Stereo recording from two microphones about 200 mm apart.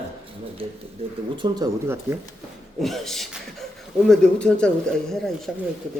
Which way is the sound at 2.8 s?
Centre (ahead or behind).